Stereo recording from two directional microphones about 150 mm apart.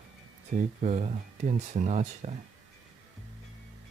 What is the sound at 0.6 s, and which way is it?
Speech, 55° right (ahead or behind).